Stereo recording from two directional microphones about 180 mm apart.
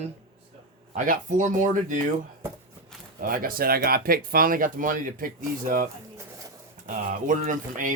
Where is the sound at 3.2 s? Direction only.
50° right (ahead or behind).